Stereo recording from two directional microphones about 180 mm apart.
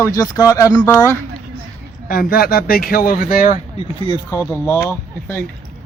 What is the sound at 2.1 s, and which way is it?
Speech, 55° left (ahead or behind).